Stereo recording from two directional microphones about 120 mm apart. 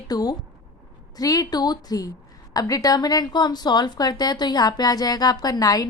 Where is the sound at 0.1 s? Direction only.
35° left (ahead or behind).